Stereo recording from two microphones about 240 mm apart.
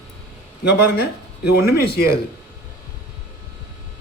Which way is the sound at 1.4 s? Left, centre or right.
Left.